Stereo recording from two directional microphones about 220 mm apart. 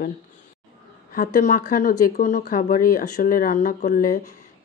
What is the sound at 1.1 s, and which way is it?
Speech, 35° left (ahead or behind).